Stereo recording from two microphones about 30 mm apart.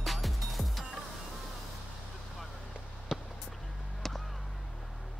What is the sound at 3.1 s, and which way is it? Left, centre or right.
Basketball bounce, right.